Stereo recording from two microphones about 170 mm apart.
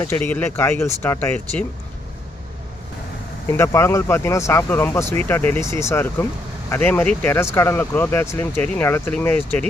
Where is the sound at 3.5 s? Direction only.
15° left (ahead or behind).